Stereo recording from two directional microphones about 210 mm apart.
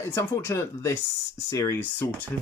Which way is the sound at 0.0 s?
10° left (ahead or behind).